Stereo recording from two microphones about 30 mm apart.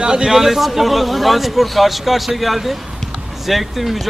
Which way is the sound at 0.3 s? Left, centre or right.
Centre.